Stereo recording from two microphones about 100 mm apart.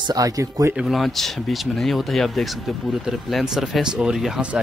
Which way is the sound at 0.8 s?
Centre (ahead or behind).